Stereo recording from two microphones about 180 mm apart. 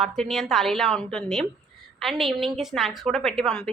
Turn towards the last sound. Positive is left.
turn(degrees=0)  # may be behind; listen again after turning